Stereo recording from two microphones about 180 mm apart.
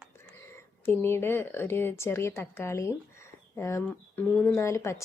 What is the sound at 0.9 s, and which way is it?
Speech, 15° left (ahead or behind).